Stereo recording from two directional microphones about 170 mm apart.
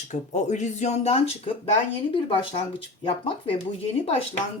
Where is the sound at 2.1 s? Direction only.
30° left (ahead or behind).